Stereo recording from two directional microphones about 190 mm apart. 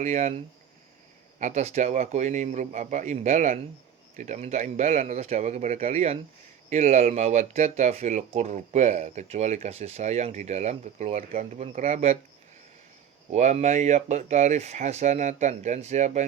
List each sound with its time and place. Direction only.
0.0 s speech: 40° right (ahead or behind)
1.4 s speech: 40° right (ahead or behind)
13.3 s speech: 35° right (ahead or behind)